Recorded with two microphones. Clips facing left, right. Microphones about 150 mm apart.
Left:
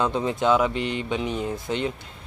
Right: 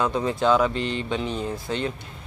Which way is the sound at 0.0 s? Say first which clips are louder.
Even; 20° left (ahead or behind).